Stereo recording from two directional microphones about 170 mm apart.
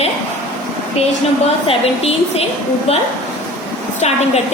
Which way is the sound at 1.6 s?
35° left (ahead or behind).